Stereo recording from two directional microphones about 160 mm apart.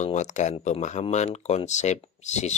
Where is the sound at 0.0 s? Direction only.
50° left (ahead or behind).